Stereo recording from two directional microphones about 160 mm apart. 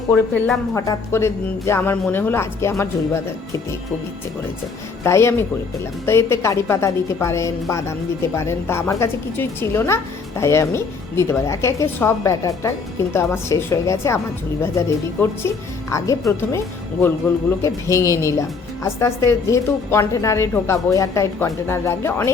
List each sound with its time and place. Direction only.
0.1 s speech: 5° left (ahead or behind)
0.8 s speech: 15° left (ahead or behind)
5.0 s a woman's voice: 15° left (ahead or behind)